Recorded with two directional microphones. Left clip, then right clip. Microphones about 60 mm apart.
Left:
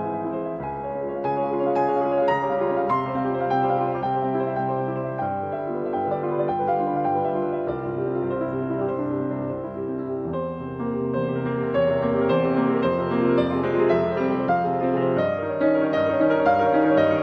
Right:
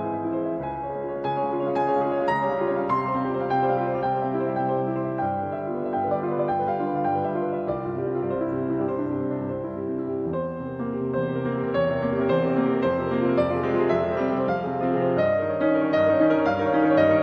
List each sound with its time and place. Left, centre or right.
1.7 s music: right
11.7 s music: right